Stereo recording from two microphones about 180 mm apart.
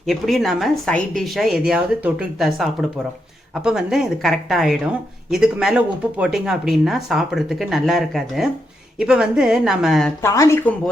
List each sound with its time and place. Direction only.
0.0 s speech: centre (ahead or behind)
10.2 s speech: 15° left (ahead or behind)